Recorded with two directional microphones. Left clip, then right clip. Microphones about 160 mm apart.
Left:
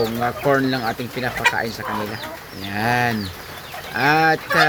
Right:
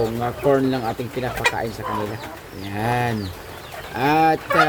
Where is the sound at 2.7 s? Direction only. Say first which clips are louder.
Left 3 dB; 5° right (ahead or behind).